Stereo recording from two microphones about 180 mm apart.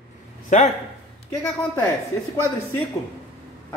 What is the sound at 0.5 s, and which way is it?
Speech, 40° left (ahead or behind).